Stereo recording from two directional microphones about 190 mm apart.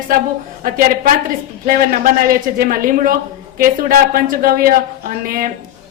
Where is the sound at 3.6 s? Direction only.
45° right (ahead or behind).